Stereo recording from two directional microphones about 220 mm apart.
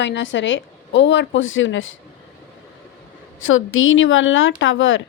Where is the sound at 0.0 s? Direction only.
55° left (ahead or behind).